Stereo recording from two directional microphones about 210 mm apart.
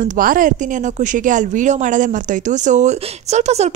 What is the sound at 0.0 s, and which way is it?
Speech, 40° right (ahead or behind).